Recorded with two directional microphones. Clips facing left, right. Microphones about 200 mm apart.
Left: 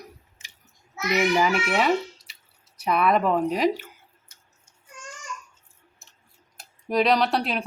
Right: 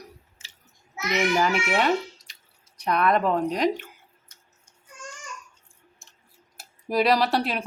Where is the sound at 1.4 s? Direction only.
5° left (ahead or behind).